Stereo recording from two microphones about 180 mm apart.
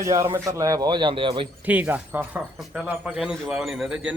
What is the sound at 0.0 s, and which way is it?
Speech, 15° right (ahead or behind).